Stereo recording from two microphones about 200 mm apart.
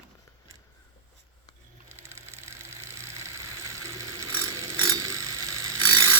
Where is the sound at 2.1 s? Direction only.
15° right (ahead or behind).